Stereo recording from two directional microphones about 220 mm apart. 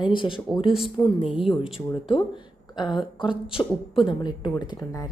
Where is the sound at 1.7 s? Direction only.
25° left (ahead or behind).